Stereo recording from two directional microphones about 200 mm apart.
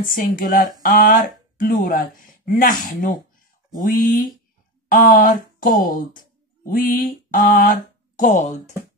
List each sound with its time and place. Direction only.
0.1 s speech: 45° left (ahead or behind)
6.6 s mantra: 45° left (ahead or behind)